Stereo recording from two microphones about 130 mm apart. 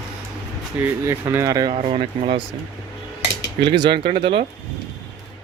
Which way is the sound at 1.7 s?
50° right (ahead or behind).